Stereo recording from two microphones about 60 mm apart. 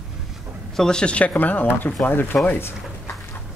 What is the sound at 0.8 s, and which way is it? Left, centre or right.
Speech, centre.